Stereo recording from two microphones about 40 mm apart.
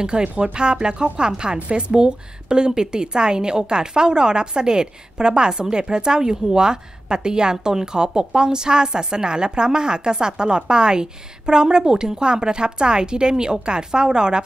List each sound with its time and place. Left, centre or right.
0.0 s a woman's voice: right